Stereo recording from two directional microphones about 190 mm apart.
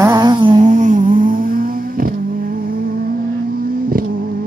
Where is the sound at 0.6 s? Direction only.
40° right (ahead or behind).